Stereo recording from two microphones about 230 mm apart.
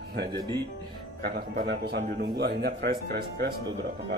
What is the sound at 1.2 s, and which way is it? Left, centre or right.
Speech, right.